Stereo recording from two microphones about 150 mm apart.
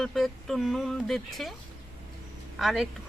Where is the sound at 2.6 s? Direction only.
Centre (ahead or behind).